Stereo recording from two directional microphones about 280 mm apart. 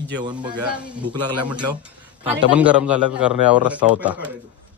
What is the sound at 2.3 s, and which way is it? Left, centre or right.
A man's voice, centre.